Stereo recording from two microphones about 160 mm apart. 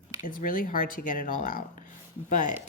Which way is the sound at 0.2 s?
55° left (ahead or behind).